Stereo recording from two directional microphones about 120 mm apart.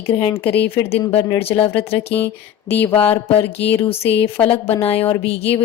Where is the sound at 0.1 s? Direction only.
40° left (ahead or behind).